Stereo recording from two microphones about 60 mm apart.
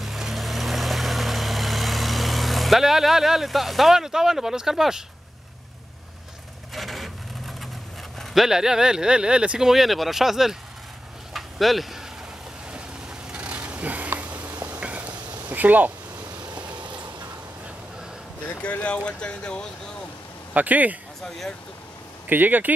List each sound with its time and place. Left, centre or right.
0.0 s vehicle: centre
6.7 s vehicle: centre
8.2 s clip-clop: centre
8.5 s speech: centre
9.7 s speech: centre
11.3 s a sound: centre
13.3 s a sound: right
14.8 s cat: right
15.4 s a sound: right
18.5 s speech: left
20.5 s speech: right
22.3 s speech: right